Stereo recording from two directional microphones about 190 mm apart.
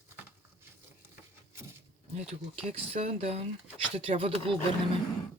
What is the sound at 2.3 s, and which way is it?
Speech, 30° right (ahead or behind).